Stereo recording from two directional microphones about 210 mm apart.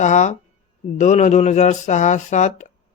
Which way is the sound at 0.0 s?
35° left (ahead or behind).